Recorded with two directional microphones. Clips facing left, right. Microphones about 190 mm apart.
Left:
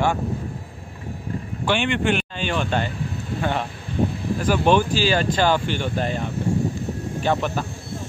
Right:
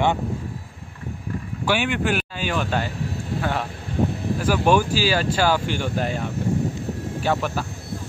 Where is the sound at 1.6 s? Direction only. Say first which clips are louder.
Left 1 dB; 5° right (ahead or behind).